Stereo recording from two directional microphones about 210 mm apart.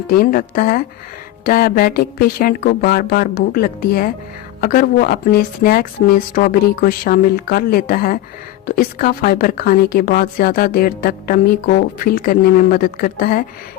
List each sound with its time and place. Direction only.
0.2 s speech: 45° left (ahead or behind)